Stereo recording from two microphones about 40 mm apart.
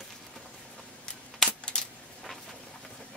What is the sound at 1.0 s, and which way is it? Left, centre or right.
Coin, centre.